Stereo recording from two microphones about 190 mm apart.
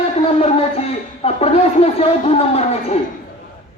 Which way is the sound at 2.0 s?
30° left (ahead or behind).